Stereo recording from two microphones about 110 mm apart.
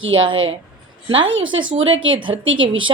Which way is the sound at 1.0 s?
50° right (ahead or behind).